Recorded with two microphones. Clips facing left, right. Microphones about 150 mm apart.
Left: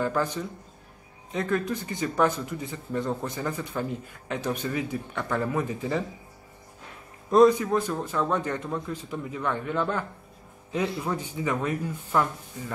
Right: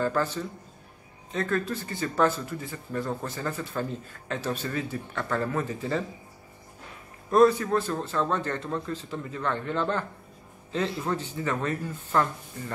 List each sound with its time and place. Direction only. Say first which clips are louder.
0.0 s speech: even; 15° left (ahead or behind)
7.2 s speech: left 2 dB; 15° left (ahead or behind)